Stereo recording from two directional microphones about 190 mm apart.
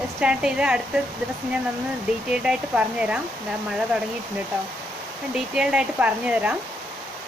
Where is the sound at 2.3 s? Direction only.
5° right (ahead or behind).